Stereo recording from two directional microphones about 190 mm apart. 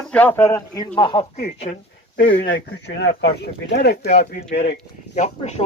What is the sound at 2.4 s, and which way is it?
Speech, 65° left (ahead or behind).